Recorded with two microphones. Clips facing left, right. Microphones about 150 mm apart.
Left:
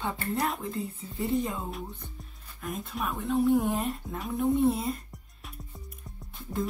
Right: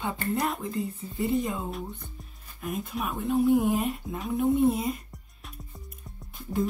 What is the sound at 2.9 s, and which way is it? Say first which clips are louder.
Speech: right 1 dB; 5° right (ahead or behind).